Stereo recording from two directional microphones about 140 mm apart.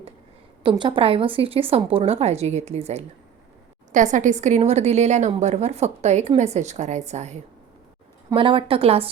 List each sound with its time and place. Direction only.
0.6 s a woman's voice: 35° right (ahead or behind)
3.9 s a woman's voice: 65° right (ahead or behind)
8.4 s a woman's voice: 40° right (ahead or behind)